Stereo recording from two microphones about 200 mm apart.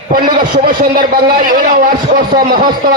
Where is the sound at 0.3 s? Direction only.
45° right (ahead or behind).